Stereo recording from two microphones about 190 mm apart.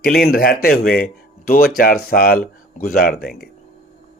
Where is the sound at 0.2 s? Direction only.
50° left (ahead or behind).